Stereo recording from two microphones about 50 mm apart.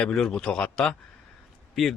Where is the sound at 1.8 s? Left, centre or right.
Centre.